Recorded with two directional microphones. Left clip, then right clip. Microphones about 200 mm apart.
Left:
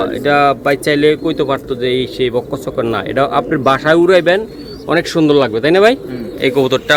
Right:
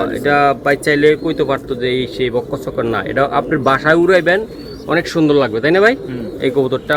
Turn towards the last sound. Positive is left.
turn(degrees=5)  # may be behind; listen again after turning